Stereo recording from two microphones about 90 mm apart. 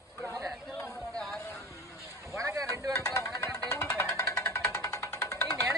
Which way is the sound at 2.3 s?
30° right (ahead or behind).